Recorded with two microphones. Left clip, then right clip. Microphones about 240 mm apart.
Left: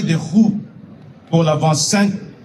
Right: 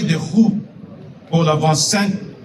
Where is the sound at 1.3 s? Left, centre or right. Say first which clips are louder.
Even; left.